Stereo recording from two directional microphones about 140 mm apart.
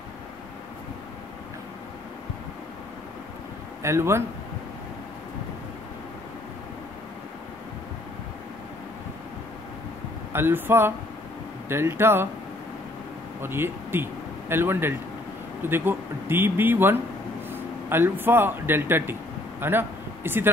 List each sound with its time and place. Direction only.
3.8 s speech: 20° right (ahead or behind)
10.3 s speech: 15° right (ahead or behind)
13.4 s a man's voice: 15° right (ahead or behind)